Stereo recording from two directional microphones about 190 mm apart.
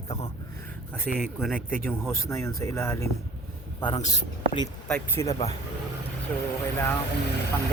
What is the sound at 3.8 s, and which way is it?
Speech, 25° left (ahead or behind).